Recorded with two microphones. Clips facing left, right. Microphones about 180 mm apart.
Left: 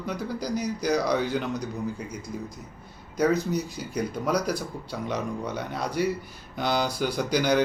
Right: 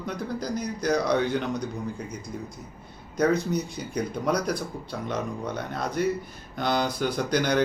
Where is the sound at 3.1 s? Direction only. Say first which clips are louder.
Even; 5° left (ahead or behind).